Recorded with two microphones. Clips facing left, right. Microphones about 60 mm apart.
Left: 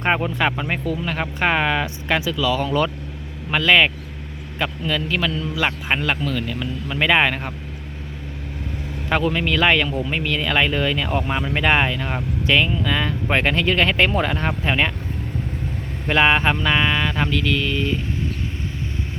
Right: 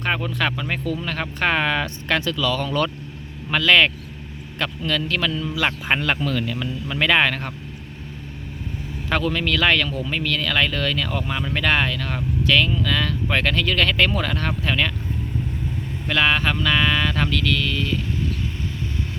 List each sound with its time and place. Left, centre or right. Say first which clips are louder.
0.0 s music: left 3 dB; left
0.9 s a man's voice: left 2 dB; centre
7.0 s a man's voice: left 1 dB; centre
9.0 s a man's voice: left 2 dB; centre
11.3 s music: left 2 dB; left
16.0 s music: left 3 dB; left